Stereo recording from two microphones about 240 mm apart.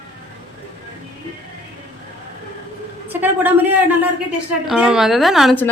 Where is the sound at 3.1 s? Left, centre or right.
Centre.